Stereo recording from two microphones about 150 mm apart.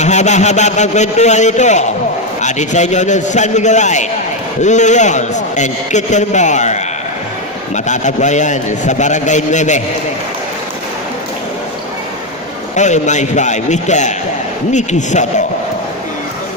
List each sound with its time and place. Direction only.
0.0 s a man's voice: 50° left (ahead or behind)
12.7 s a man's voice: 50° left (ahead or behind)